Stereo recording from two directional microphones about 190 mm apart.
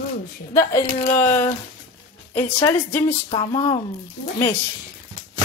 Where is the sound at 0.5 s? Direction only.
15° left (ahead or behind).